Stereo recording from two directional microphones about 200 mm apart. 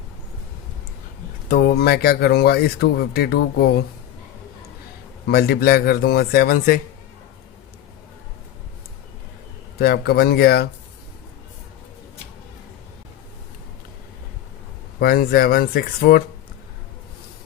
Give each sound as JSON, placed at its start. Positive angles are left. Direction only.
{"t": 1.5, "sound": "speech", "side_deg": 50}
{"t": 5.3, "sound": "speech", "side_deg": 50}
{"t": 9.7, "sound": "speech", "side_deg": 50}
{"t": 14.9, "sound": "speech", "side_deg": 50}